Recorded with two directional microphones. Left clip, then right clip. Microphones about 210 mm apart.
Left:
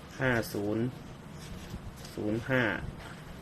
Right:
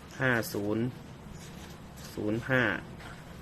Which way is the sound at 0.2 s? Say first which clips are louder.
Right 1 dB; 5° right (ahead or behind).